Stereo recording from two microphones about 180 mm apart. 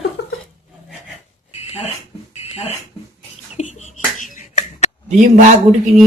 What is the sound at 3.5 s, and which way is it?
Beatboxing, 40° left (ahead or behind).